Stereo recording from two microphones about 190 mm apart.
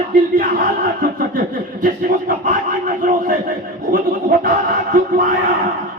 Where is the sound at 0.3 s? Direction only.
50° right (ahead or behind).